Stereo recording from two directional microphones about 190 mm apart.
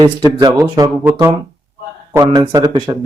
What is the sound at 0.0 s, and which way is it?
Speech, 20° right (ahead or behind).